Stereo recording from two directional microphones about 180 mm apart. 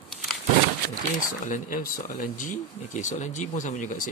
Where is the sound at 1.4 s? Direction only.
50° left (ahead or behind).